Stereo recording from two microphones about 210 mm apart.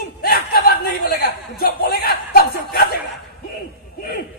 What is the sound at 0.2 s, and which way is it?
Chuckle, 45° left (ahead or behind).